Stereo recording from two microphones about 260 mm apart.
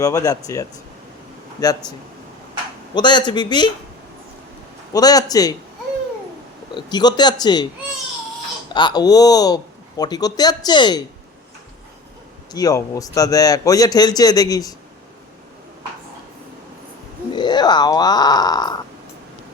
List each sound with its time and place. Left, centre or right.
0.0 s a man's voice: centre
2.9 s a man's voice: centre
4.9 s a man's voice: centre
6.7 s a man's voice: centre
8.7 s a man's voice: centre
12.5 s a man's voice: centre
17.3 s speech: centre